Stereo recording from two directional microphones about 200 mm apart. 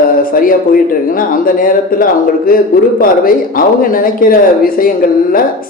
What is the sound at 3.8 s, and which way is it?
A man's voice, 45° left (ahead or behind).